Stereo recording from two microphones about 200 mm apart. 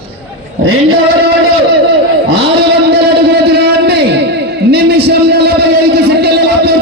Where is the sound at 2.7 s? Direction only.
55° right (ahead or behind).